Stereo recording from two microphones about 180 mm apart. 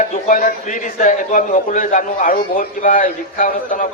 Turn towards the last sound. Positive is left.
turn(degrees=50)  # may be behind; listen again after turning